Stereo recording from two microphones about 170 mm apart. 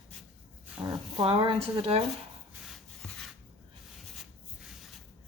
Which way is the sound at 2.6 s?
Centre (ahead or behind).